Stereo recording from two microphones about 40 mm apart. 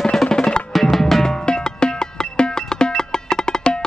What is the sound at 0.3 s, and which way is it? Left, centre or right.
Percussion, left.